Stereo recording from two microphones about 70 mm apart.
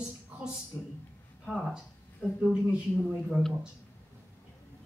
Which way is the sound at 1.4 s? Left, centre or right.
Centre.